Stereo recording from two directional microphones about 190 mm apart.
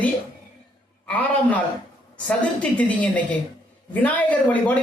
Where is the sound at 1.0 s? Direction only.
10° left (ahead or behind).